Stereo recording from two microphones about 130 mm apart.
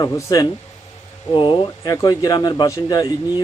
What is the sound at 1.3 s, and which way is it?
A man's voice, 40° left (ahead or behind).